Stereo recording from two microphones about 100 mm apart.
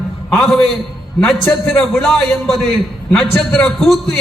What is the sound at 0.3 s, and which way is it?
A man's voice, 5° left (ahead or behind).